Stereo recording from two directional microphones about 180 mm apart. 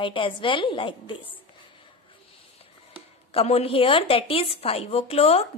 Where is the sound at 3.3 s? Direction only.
35° left (ahead or behind).